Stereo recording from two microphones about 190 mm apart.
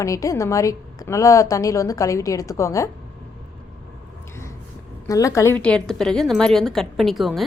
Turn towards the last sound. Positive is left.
turn(degrees=0)  # may be behind; listen again after turning